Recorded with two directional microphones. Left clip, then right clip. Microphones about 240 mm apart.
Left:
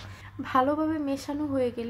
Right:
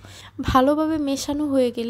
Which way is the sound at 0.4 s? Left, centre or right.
Right.